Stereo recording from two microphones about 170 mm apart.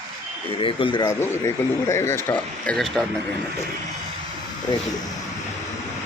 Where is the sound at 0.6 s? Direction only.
30° left (ahead or behind).